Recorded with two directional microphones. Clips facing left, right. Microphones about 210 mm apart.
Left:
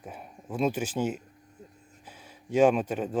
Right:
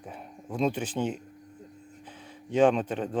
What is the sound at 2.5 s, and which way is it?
Speech, 10° left (ahead or behind).